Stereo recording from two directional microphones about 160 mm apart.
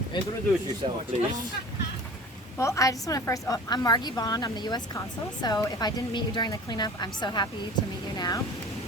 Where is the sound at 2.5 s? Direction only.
20° left (ahead or behind).